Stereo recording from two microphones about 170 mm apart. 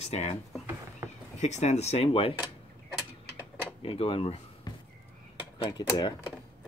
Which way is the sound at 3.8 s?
30° left (ahead or behind).